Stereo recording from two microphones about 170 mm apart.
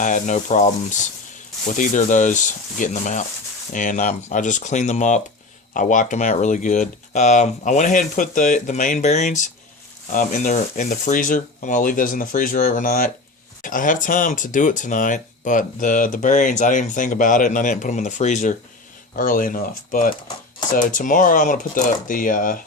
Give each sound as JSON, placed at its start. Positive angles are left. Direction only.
{"t": 0.0, "sound": "speech", "side_deg": 45}
{"t": 1.7, "sound": "speech", "side_deg": 50}
{"t": 19.1, "sound": "speech", "side_deg": 55}